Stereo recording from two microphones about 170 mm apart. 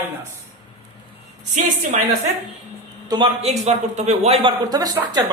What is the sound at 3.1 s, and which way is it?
Speech, 25° right (ahead or behind).